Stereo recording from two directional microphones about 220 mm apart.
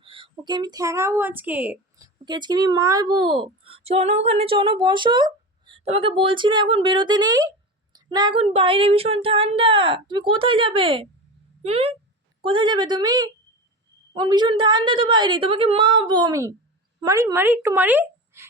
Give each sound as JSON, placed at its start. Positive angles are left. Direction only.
{"t": 0.0, "sound": "a woman's voice", "side_deg": -25}
{"t": 2.2, "sound": "a woman's voice", "side_deg": -20}